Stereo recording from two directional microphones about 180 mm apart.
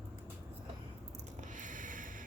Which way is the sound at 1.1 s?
40° right (ahead or behind).